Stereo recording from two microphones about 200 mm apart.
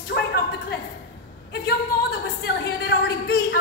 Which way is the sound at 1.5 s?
55° left (ahead or behind).